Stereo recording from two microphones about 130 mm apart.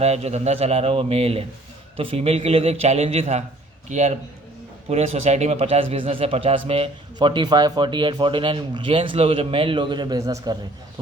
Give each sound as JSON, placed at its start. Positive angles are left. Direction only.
{"t": 0.0, "sound": "a man's voice", "side_deg": -55}
{"t": 7.2, "sound": "speech", "side_deg": -35}